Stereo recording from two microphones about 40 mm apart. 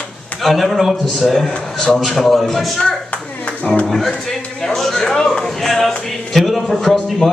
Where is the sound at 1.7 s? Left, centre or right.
Centre.